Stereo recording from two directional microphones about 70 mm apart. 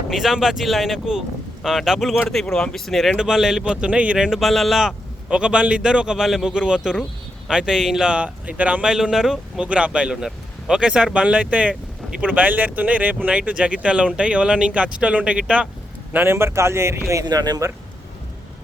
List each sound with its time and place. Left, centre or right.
0.1 s speech: centre
2.3 s speech: centre
4.3 s speech: centre
5.3 s speech: centre
16.1 s speech: right
17.2 s speech: right